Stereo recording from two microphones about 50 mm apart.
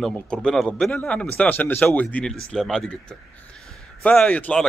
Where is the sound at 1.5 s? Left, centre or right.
Left.